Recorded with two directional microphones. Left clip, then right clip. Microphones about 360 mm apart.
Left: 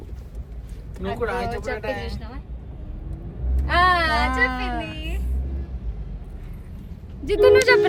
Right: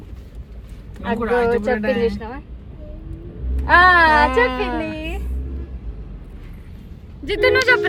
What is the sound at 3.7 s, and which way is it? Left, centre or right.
Speech, right.